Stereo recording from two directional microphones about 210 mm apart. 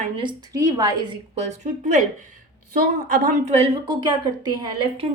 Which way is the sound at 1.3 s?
35° right (ahead or behind).